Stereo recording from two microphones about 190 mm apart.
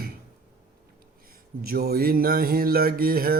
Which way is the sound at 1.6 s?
55° right (ahead or behind).